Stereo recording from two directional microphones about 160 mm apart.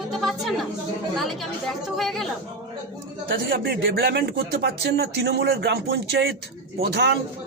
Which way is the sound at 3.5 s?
70° right (ahead or behind).